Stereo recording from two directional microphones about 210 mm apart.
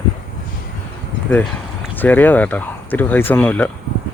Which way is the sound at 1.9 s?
10° left (ahead or behind).